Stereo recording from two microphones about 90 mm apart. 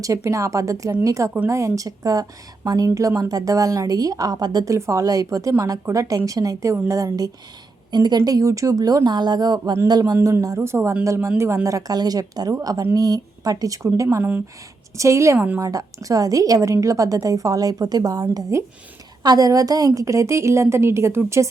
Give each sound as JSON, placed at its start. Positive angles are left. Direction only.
{"t": 0.0, "sound": "a woman's voice", "side_deg": -35}
{"t": 7.9, "sound": "speech", "side_deg": -55}
{"t": 10.4, "sound": "a woman's voice", "side_deg": -35}